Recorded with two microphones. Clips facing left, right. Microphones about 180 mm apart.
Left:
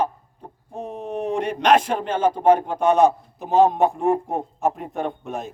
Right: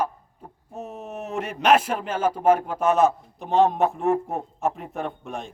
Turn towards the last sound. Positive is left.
turn(degrees=0)  # may be behind; listen again after turning